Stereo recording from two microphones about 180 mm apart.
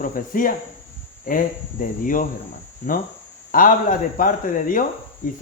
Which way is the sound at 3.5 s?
50° left (ahead or behind).